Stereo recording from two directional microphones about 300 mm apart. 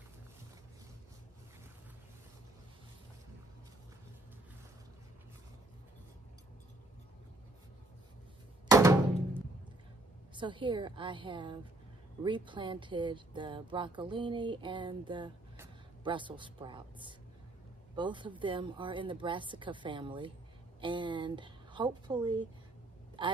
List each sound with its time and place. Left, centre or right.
8.6 s music: centre
10.3 s a woman's voice: centre